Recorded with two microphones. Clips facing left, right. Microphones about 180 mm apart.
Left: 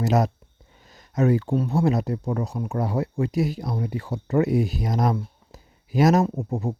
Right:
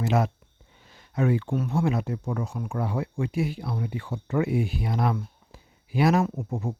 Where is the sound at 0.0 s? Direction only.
40° left (ahead or behind).